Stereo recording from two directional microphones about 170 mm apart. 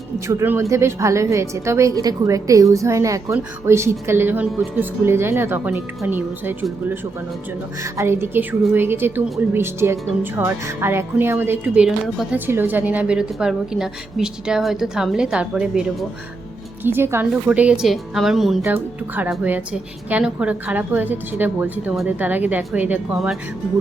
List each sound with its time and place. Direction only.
0.3 s a woman's voice: 15° right (ahead or behind)
7.9 s a woman's voice: 15° right (ahead or behind)
12.5 s a woman's voice: 10° right (ahead or behind)
18.6 s a woman's voice: 10° right (ahead or behind)